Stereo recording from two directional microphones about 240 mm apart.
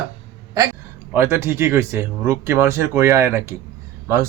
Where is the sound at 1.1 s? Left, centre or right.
Centre.